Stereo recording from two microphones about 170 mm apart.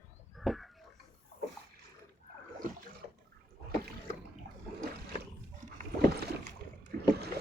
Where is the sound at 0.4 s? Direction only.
Centre (ahead or behind).